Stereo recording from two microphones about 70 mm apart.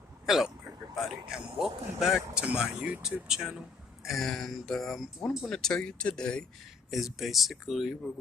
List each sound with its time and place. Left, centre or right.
0.3 s speech: centre
3.2 s speech: centre
6.9 s speech: centre